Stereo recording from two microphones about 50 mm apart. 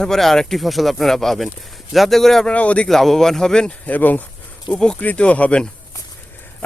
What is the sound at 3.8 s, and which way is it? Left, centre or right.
Speech, left.